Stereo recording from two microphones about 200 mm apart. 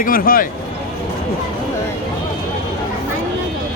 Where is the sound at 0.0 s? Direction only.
45° left (ahead or behind).